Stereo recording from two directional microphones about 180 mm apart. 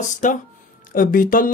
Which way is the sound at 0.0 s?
45° left (ahead or behind).